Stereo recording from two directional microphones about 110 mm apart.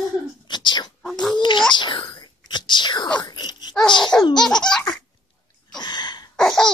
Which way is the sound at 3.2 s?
40° left (ahead or behind).